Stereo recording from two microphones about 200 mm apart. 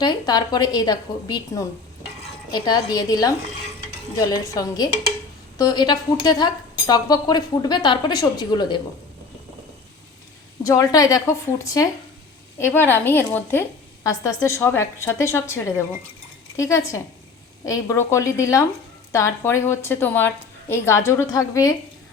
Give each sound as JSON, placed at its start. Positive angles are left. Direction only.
{"t": 0.0, "sound": "a woman's voice", "side_deg": 20}
{"t": 10.6, "sound": "a woman's voice", "side_deg": 15}